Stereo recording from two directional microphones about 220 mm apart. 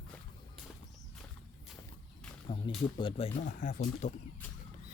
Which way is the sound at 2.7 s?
20° left (ahead or behind).